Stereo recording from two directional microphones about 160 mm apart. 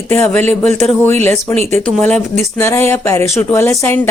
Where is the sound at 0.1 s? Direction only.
15° left (ahead or behind).